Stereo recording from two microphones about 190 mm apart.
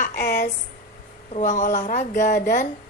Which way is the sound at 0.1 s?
60° left (ahead or behind).